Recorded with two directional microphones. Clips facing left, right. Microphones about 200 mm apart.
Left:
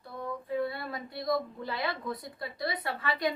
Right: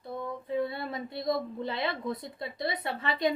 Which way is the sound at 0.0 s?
25° right (ahead or behind).